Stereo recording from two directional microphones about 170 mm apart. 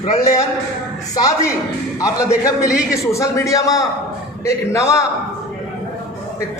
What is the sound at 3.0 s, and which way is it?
A man's voice, 15° left (ahead or behind).